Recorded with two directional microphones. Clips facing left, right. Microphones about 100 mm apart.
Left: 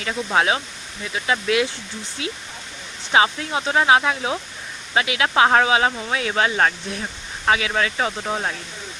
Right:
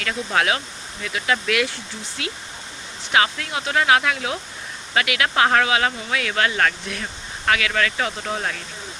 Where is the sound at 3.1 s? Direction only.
25° left (ahead or behind).